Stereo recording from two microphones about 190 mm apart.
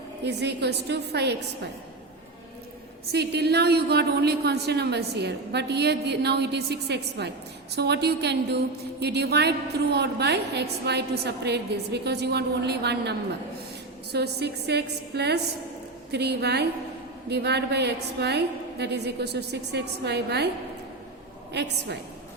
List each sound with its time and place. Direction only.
0.3 s a woman's voice: 60° right (ahead or behind)
3.1 s a woman's voice: 60° right (ahead or behind)
21.5 s a woman's voice: 60° right (ahead or behind)